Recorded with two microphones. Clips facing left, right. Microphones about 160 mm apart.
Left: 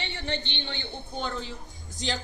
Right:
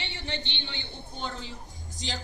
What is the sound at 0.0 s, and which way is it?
A man's voice, 50° left (ahead or behind).